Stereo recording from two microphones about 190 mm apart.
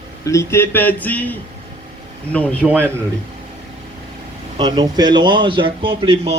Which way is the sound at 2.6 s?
5° right (ahead or behind).